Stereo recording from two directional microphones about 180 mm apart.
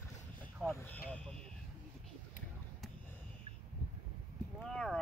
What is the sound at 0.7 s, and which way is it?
Speech, 10° left (ahead or behind).